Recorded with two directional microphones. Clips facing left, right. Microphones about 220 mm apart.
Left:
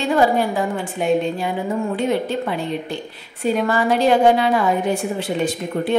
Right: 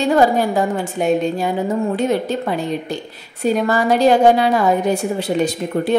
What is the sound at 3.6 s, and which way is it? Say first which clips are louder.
A woman's voice: right 3 dB; 40° right (ahead or behind).